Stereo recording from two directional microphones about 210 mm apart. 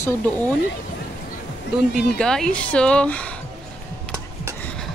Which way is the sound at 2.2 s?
5° left (ahead or behind).